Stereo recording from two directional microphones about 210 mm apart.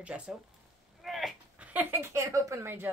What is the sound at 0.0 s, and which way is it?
A woman's voice, 5° right (ahead or behind).